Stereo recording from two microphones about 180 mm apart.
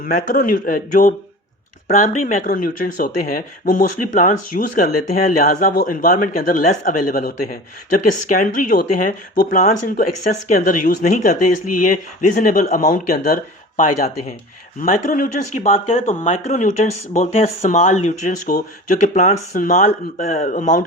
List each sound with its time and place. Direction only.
0.0 s speech: 45° left (ahead or behind)